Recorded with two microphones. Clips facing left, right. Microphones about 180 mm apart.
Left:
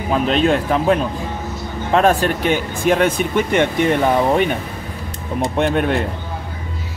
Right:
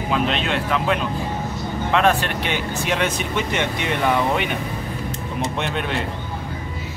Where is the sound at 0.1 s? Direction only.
40° left (ahead or behind).